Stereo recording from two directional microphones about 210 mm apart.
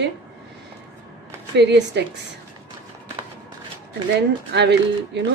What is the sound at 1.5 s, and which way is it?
Speech, 55° right (ahead or behind).